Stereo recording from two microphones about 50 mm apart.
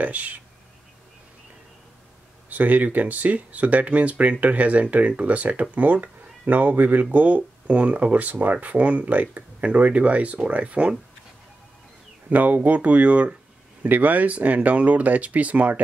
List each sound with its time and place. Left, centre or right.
0.0 s speech: right
2.5 s speech: right
12.3 s speech: right
13.8 s speech: right